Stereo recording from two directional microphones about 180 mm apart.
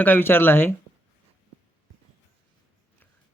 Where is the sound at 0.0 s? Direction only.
10° left (ahead or behind).